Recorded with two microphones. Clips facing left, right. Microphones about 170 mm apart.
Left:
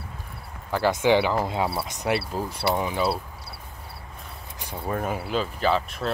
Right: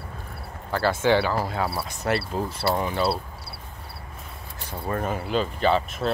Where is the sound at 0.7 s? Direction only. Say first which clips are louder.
Left 1 dB; 15° left (ahead or behind).